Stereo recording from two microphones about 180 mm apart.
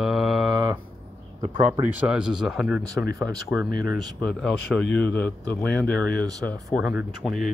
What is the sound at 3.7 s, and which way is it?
Speech, 55° left (ahead or behind).